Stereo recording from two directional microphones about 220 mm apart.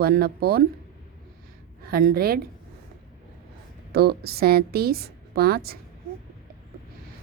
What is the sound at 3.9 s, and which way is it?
A woman's voice, 45° right (ahead or behind).